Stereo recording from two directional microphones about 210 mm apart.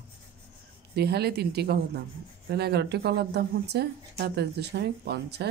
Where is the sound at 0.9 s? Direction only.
50° right (ahead or behind).